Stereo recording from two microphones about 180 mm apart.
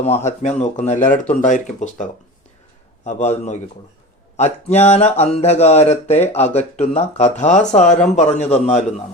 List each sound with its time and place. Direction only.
0.3 s speech: 40° left (ahead or behind)